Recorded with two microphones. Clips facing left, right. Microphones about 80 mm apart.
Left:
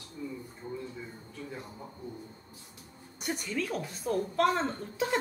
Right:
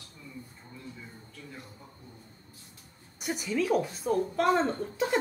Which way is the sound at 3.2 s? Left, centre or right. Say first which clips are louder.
Right 3 dB; centre.